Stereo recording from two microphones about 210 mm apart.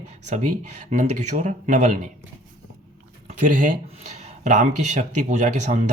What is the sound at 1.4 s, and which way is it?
Speech, 35° right (ahead or behind).